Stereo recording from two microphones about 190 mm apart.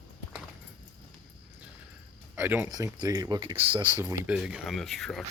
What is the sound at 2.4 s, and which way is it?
Speech, 10° right (ahead or behind).